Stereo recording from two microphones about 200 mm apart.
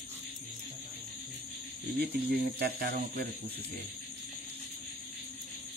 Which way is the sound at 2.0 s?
50° right (ahead or behind).